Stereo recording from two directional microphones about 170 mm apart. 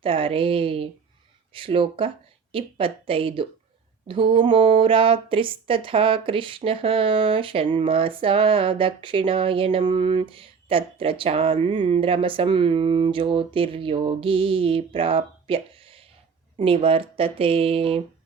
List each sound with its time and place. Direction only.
0.0 s a woman's voice: 30° right (ahead or behind)